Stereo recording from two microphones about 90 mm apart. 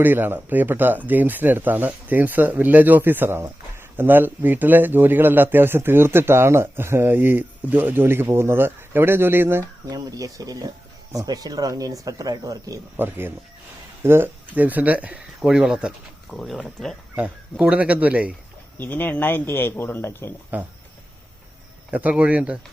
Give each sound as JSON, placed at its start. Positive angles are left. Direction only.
{"t": 0.0, "sound": "speech", "side_deg": -20}
{"t": 9.9, "sound": "speech", "side_deg": -40}
{"t": 13.0, "sound": "speech", "side_deg": -25}
{"t": 17.2, "sound": "speech", "side_deg": -15}
{"t": 18.8, "sound": "speech", "side_deg": 20}
{"t": 20.5, "sound": "speech", "side_deg": -20}
{"t": 21.8, "sound": "speech", "side_deg": -15}